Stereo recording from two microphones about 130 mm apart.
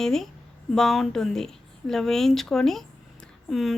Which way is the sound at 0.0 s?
5° left (ahead or behind).